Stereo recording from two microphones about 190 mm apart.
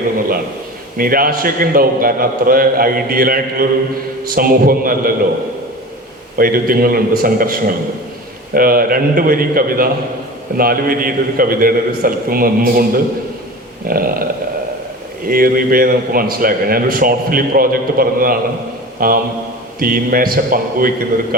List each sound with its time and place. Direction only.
0.9 s a man's voice: 50° right (ahead or behind)
6.3 s a man's voice: 50° right (ahead or behind)
13.8 s a man's voice: 50° right (ahead or behind)
15.3 s a man's voice: 50° right (ahead or behind)
18.9 s mantra: 50° right (ahead or behind)
19.8 s a man's voice: 50° right (ahead or behind)